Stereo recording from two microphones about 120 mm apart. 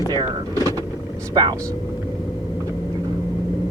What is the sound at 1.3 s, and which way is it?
Speech, 35° right (ahead or behind).